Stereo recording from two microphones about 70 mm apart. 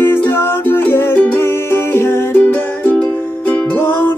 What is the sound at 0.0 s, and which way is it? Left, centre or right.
Music, left.